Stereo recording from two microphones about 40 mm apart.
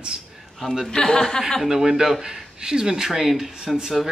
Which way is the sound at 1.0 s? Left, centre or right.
Centre.